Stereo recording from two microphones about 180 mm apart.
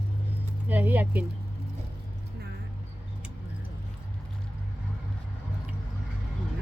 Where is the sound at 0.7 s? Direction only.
10° right (ahead or behind).